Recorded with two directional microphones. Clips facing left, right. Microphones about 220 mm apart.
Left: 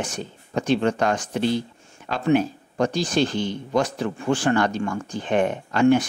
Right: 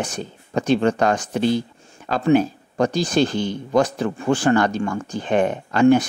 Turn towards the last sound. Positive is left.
turn(degrees=-40)  # may be behind; listen again after turning